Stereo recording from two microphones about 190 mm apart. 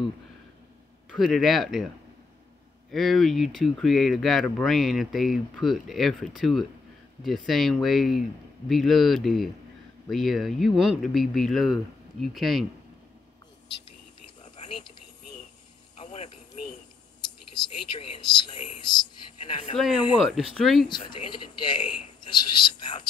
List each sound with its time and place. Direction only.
1.1 s speech: centre (ahead or behind)
2.9 s speech: centre (ahead or behind)
16.0 s a sound: 35° left (ahead or behind)
17.9 s a man's voice: 25° left (ahead or behind)
20.2 s speech: centre (ahead or behind)
20.9 s a man's voice: 25° left (ahead or behind)